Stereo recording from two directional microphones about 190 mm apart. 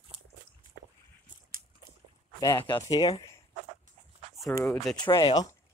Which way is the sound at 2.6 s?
20° left (ahead or behind).